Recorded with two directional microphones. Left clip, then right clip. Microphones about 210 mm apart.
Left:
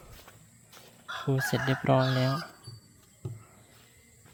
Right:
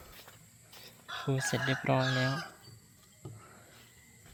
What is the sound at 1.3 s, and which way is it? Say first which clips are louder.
Speech: left 3 dB; 20° left (ahead or behind).